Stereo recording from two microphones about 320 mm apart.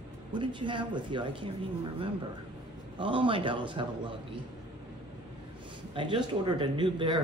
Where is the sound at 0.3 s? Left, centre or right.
Centre.